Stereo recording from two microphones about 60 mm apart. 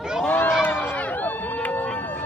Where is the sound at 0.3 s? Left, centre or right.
Left.